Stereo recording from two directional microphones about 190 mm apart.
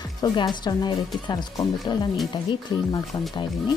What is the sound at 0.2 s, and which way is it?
Speech, 20° left (ahead or behind).